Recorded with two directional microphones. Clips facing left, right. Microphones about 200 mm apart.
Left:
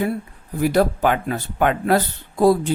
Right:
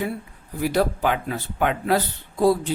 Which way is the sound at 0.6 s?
50° left (ahead or behind).